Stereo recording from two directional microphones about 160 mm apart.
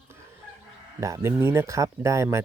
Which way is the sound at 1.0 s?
20° right (ahead or behind).